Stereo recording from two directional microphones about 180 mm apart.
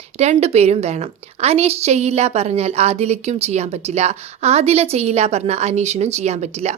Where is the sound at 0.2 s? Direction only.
35° right (ahead or behind).